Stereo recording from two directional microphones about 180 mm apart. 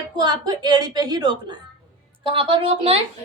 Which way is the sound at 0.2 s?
25° right (ahead or behind).